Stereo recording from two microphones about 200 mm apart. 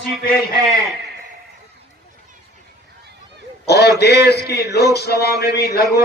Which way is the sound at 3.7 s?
55° left (ahead or behind).